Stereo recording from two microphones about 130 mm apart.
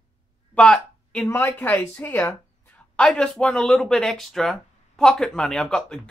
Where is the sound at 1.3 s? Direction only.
15° left (ahead or behind).